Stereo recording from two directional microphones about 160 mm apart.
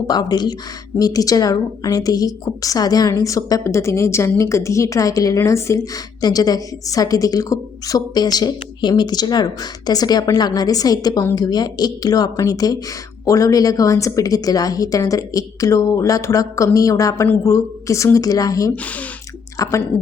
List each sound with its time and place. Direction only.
0.1 s a woman's voice: 25° left (ahead or behind)